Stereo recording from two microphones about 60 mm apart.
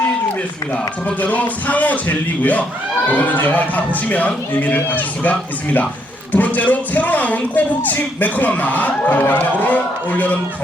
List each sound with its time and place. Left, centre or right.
0.7 s a man's voice: left